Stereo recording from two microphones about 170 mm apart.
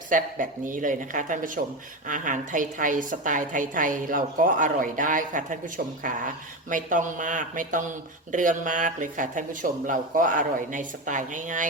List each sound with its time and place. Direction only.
0.1 s a woman's voice: 50° right (ahead or behind)